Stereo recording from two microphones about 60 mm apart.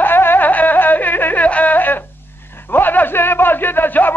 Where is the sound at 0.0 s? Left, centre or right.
Left.